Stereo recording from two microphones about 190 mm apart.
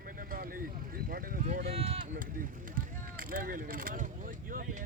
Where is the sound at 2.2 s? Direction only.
45° right (ahead or behind).